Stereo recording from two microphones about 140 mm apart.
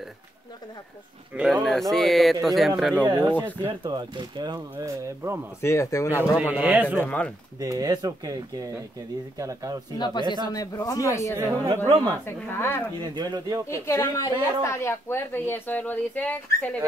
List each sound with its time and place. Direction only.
1.3 s speech: 5° right (ahead or behind)
3.1 s speech: 30° right (ahead or behind)
5.6 s speech: 20° left (ahead or behind)
6.5 s speech: 10° right (ahead or behind)
7.0 s speech: 10° left (ahead or behind)
7.6 s speech: 25° right (ahead or behind)
9.9 s speech: 30° left (ahead or behind)
10.2 s speech: 30° right (ahead or behind)
10.5 s speech: 25° left (ahead or behind)
11.3 s speech: 25° right (ahead or behind)
12.3 s speech: 15° left (ahead or behind)
13.0 s speech: 30° right (ahead or behind)
13.7 s speech: 20° left (ahead or behind)